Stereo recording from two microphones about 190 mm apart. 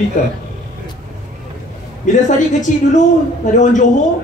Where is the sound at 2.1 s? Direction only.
40° left (ahead or behind).